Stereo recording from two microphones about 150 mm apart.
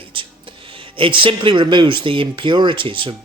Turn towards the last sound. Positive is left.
turn(degrees=-35)  # may be behind; listen again after turning